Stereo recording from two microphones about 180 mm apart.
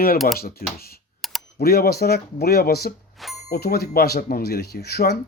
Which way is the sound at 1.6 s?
60° left (ahead or behind).